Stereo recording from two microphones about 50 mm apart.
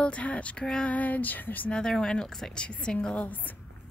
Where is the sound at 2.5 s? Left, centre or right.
Centre.